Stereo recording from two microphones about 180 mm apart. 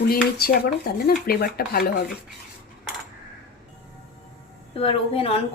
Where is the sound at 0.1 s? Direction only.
55° left (ahead or behind).